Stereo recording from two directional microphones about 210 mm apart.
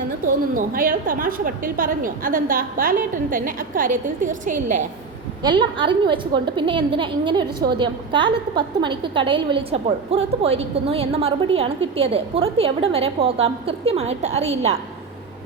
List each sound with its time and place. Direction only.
0.5 s a woman's voice: 40° right (ahead or behind)
5.4 s a woman's voice: 20° right (ahead or behind)